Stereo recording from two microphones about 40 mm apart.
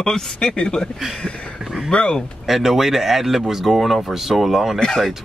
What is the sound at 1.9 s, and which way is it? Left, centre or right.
Speech, left.